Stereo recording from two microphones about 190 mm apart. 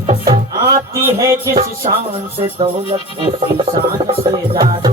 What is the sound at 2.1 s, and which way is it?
Speech, 30° right (ahead or behind).